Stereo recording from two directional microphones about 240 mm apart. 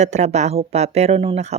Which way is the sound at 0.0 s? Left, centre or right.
Right.